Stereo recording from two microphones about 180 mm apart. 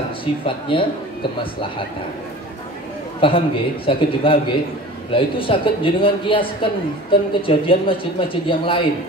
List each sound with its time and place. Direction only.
0.2 s a man's voice: 30° left (ahead or behind)
3.2 s a man's voice: 30° left (ahead or behind)